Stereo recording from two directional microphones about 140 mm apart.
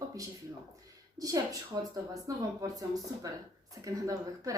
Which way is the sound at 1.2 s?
25° right (ahead or behind).